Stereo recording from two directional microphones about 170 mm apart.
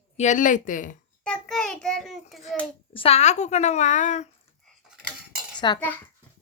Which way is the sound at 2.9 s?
35° left (ahead or behind).